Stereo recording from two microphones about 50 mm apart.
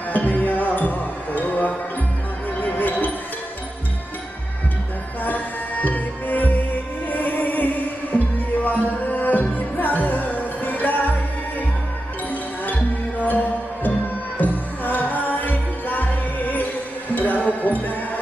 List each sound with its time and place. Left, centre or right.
0.1 s music: left
5.2 s music: left
12.3 s music: left